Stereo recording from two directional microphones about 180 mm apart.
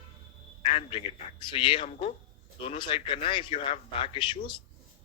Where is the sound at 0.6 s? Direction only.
30° left (ahead or behind).